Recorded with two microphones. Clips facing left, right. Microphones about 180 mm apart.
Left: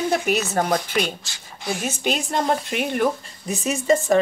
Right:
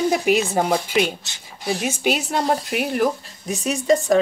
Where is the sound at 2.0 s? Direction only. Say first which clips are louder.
Right 1 dB; 10° right (ahead or behind).